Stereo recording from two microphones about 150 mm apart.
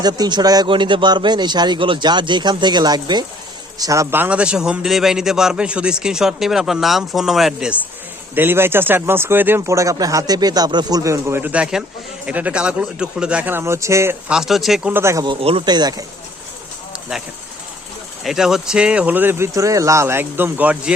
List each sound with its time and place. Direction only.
0.0 s a man's voice: 30° right (ahead or behind); by 7.8 s 5° right (ahead or behind)
8.4 s speech: 15° right (ahead or behind)
14.3 s a man's voice: 5° right (ahead or behind)
14.9 s speech: 20° right (ahead or behind)
15.2 s a man's voice: 35° right (ahead or behind)
18.2 s speech: centre (ahead or behind)